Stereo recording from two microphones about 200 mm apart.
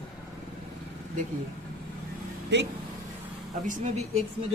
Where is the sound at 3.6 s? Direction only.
40° right (ahead or behind).